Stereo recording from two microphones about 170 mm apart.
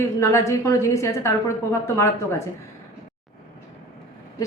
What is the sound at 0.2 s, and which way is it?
A woman's voice, 15° left (ahead or behind).